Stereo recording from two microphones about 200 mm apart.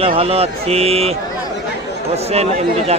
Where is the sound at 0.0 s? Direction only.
30° right (ahead or behind).